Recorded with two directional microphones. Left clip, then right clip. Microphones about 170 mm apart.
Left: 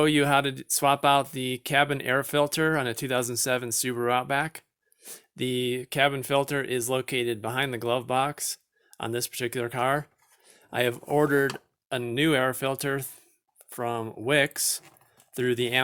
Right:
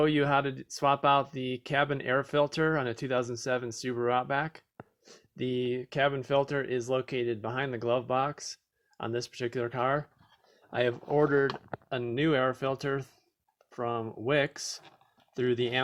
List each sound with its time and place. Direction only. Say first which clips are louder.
0.0 s speech: left 4 dB; 25° left (ahead or behind)